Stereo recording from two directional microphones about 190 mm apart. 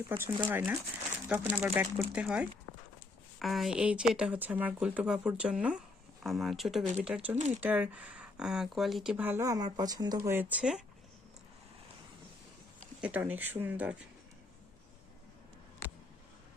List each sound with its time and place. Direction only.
0.2 s speech: 10° right (ahead or behind)
7.3 s speech: 40° right (ahead or behind)
7.6 s speech: 10° right (ahead or behind)
13.0 s speech: 10° right (ahead or behind)
15.8 s a sound: 10° left (ahead or behind)